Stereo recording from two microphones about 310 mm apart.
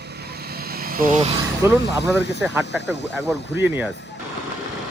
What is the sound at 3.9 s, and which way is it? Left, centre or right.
Speech, left.